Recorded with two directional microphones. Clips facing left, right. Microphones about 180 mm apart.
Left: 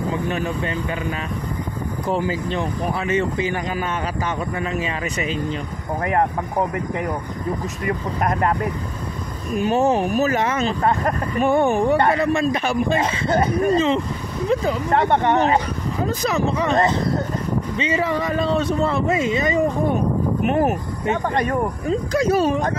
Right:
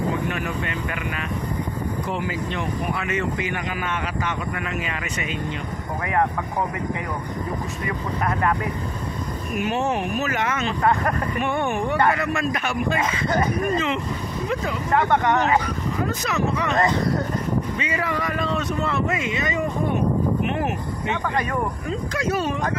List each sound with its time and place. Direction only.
2.0 s speech: 35° left (ahead or behind)
4.6 s speech: 30° left (ahead or behind)
8.3 s speech: 40° left (ahead or behind)